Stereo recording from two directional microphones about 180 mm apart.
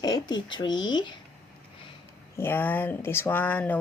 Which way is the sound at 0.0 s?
25° left (ahead or behind).